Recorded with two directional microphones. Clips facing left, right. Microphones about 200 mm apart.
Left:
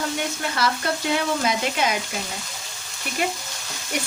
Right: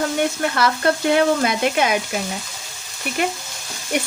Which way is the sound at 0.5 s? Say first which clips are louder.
Right 5 dB; 55° right (ahead or behind).